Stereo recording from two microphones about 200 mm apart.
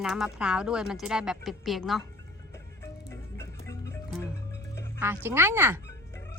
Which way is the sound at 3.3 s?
15° left (ahead or behind).